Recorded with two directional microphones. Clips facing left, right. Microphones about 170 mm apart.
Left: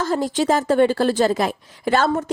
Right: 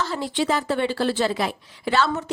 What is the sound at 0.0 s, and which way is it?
Speech, 45° left (ahead or behind).